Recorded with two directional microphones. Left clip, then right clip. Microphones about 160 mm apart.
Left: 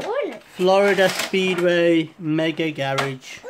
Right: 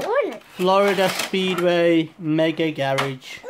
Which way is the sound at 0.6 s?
5° right (ahead or behind).